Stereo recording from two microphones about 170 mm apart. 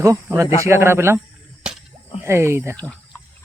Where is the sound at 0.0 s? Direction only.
15° right (ahead or behind).